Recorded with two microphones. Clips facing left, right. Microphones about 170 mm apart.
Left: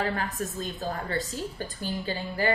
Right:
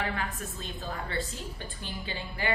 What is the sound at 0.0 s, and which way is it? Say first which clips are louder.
A woman's voice: left 4 dB; 40° left (ahead or behind).